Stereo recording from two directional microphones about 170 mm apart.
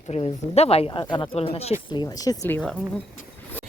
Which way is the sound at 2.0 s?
20° left (ahead or behind).